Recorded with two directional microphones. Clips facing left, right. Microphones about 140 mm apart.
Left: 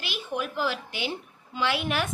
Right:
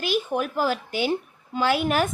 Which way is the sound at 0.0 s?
45° right (ahead or behind).